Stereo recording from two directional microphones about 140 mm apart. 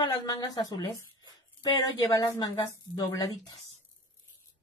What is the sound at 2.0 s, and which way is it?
Speech, 20° left (ahead or behind).